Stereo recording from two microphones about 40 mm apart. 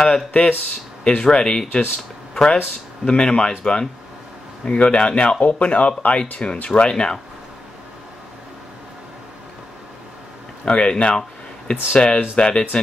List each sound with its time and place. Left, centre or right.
0.3 s speech: left
1.0 s speech: left
10.6 s speech: left